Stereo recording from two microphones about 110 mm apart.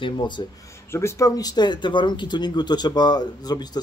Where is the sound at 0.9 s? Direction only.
25° left (ahead or behind).